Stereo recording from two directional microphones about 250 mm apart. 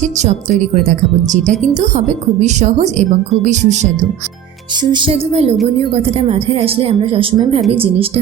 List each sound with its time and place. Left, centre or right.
0.0 s a woman's voice: right
4.8 s a woman's voice: centre